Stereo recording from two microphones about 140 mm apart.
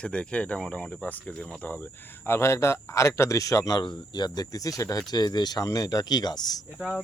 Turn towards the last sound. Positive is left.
turn(degrees=-10)  # may be behind; listen again after turning